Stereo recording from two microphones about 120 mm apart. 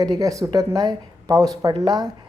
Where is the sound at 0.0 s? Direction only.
30° right (ahead or behind).